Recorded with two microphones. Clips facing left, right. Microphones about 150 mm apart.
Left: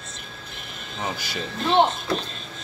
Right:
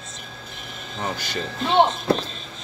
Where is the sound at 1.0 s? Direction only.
10° left (ahead or behind).